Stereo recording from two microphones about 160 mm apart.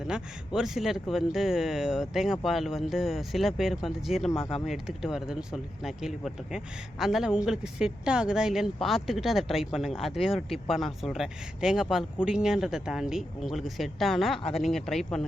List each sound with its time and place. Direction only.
0.1 s speech: 5° right (ahead or behind)
4.4 s speech: 35° left (ahead or behind)
4.6 s speech: centre (ahead or behind)